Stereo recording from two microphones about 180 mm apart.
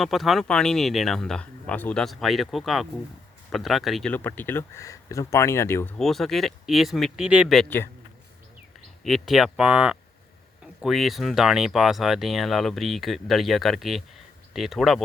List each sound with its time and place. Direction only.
0.0 s speech: centre (ahead or behind)
6.0 s speech: centre (ahead or behind)
9.0 s speech: centre (ahead or behind)